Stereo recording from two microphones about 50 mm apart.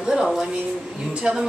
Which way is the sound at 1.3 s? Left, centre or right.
Centre.